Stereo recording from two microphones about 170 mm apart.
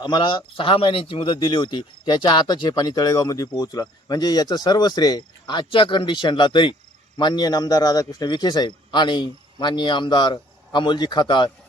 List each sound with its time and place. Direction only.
0.0 s speech: 25° left (ahead or behind)